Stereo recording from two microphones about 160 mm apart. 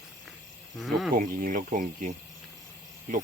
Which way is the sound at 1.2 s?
55° right (ahead or behind).